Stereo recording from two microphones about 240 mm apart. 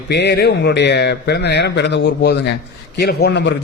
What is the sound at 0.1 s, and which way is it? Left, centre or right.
A man's voice, left.